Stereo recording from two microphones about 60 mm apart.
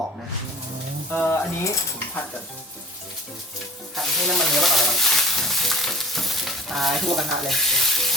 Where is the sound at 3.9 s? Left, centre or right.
Centre.